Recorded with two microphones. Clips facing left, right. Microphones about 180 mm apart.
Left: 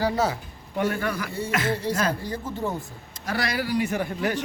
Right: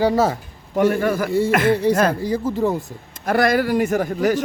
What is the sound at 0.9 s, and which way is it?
Speech, 45° right (ahead or behind).